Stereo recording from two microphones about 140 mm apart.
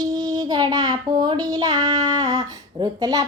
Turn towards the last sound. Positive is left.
turn(degrees=-30)  # may be behind; listen again after turning